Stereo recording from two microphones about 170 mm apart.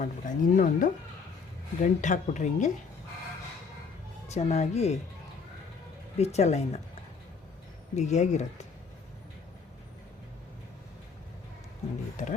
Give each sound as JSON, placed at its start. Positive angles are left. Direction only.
{"t": 0.0, "sound": "speech", "side_deg": 50}
{"t": 4.3, "sound": "speech", "side_deg": 40}
{"t": 6.1, "sound": "speech", "side_deg": 40}
{"t": 7.9, "sound": "speech", "side_deg": 45}